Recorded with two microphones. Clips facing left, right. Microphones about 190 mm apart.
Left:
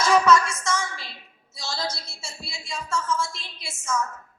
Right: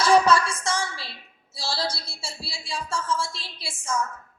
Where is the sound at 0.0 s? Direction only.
30° right (ahead or behind).